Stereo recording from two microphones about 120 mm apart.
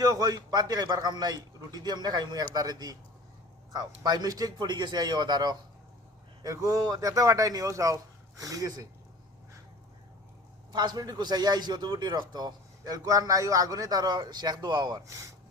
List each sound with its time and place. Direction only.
0.0 s a man's voice: 30° right (ahead or behind)
10.7 s speech: 35° right (ahead or behind)